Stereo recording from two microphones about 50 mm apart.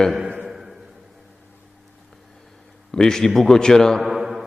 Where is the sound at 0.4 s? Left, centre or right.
Centre.